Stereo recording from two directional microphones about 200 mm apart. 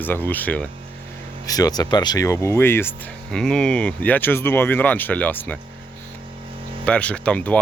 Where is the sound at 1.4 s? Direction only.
20° left (ahead or behind).